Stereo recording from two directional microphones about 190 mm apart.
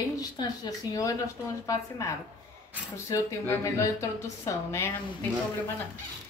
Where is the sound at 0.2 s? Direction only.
20° left (ahead or behind).